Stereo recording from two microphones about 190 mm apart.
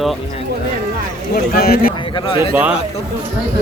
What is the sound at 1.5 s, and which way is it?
Speech, 50° left (ahead or behind).